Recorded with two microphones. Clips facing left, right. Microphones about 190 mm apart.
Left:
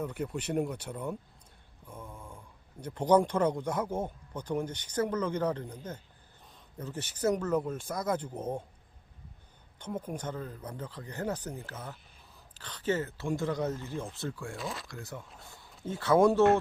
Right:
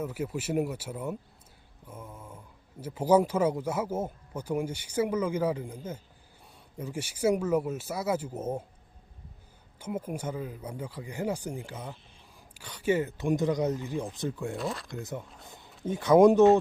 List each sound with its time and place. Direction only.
0.0 s speech: 5° right (ahead or behind)
1.9 s mantra: 5° right (ahead or behind)
2.8 s speech: 5° right (ahead or behind)
9.7 s speech: 10° right (ahead or behind)
14.6 s speech: centre (ahead or behind)
14.8 s speech: 20° right (ahead or behind)
15.4 s a sound: 20° right (ahead or behind)
15.8 s speech: 15° right (ahead or behind)